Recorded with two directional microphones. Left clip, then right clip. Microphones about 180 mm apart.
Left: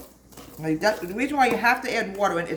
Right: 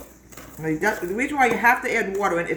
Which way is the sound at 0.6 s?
10° left (ahead or behind).